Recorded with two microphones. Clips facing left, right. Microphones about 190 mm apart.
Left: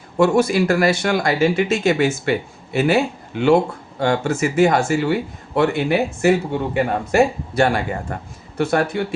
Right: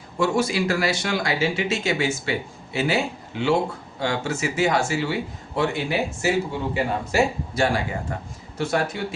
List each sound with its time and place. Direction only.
0.2 s speech: 55° left (ahead or behind)